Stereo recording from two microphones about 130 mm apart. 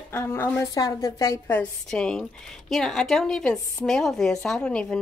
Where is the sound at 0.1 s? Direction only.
20° left (ahead or behind).